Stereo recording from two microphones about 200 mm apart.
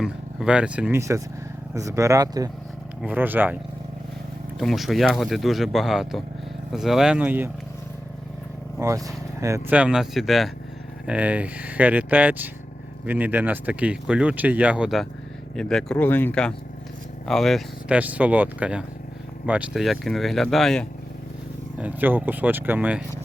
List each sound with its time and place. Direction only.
0.0 s speech: 5° right (ahead or behind)
8.8 s speech: 15° right (ahead or behind); by 20.8 s centre (ahead or behind)
21.8 s speech: 10° right (ahead or behind)